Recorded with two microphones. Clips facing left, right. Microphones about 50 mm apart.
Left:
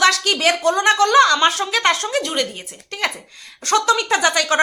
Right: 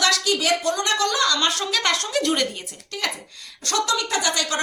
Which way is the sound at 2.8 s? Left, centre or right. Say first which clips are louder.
Left 5 dB; left.